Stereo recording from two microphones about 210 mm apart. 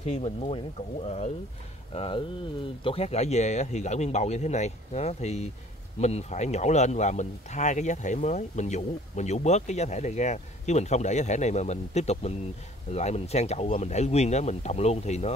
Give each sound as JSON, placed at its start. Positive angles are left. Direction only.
{"t": 0.0, "sound": "speech", "side_deg": 30}